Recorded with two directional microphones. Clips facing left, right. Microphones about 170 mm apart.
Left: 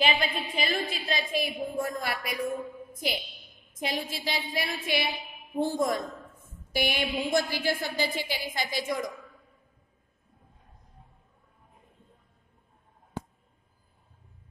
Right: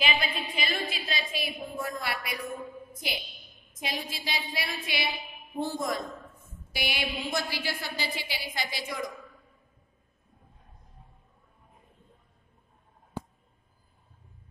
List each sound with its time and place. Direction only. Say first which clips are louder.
0.0 s a woman's voice: left 3 dB; 45° left (ahead or behind)
2.9 s a sound: left 6 dB; 45° left (ahead or behind)
3.8 s a woman's voice: left 4 dB; 45° left (ahead or behind)